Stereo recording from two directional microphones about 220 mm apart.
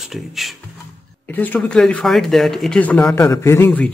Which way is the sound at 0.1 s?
Centre (ahead or behind).